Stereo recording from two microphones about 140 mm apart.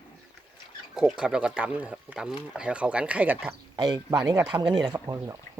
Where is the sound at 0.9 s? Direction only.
5° right (ahead or behind).